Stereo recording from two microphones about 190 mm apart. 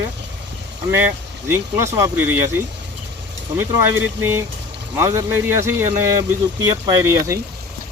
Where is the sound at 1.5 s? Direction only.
15° right (ahead or behind).